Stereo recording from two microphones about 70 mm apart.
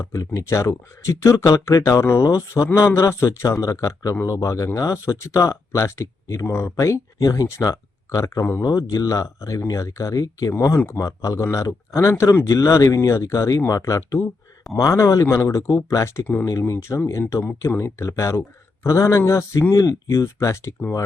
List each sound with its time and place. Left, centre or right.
0.0 s speech: left
7.2 s speech: left
8.6 s speech: left
16.2 s speech: left
16.5 s speech: left